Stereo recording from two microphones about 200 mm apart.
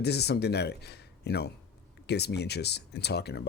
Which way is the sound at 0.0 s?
55° left (ahead or behind).